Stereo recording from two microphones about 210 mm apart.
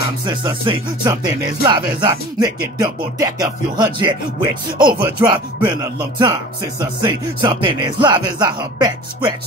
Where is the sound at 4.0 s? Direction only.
20° right (ahead or behind).